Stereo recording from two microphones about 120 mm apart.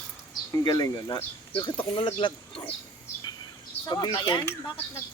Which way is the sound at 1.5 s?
45° left (ahead or behind).